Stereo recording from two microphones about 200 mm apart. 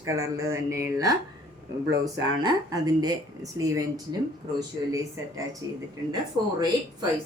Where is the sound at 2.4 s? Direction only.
20° right (ahead or behind).